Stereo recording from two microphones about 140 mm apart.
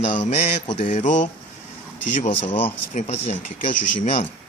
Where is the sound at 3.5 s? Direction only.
65° left (ahead or behind).